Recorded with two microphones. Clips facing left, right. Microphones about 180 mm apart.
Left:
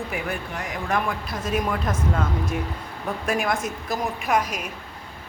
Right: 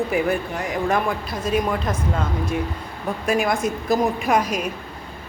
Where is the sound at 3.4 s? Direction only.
Centre (ahead or behind).